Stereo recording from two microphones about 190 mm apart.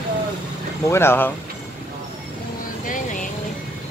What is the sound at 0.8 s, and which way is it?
Speech, 15° left (ahead or behind).